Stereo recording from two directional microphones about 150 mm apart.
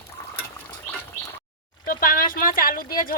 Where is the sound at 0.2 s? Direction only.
20° left (ahead or behind).